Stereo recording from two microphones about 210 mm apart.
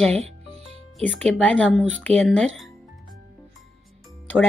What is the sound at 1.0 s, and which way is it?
Speech, 5° left (ahead or behind).